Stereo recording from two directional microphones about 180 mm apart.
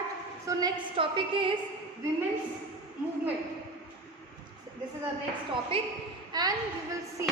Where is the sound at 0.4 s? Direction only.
25° right (ahead or behind).